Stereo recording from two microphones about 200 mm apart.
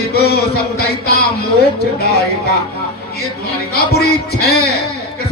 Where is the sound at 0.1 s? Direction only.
50° left (ahead or behind).